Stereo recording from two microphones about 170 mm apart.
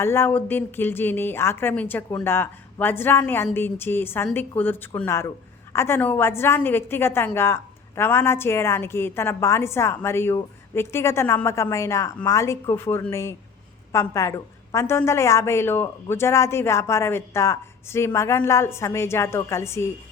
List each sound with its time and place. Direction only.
0.0 s speech: 15° left (ahead or behind)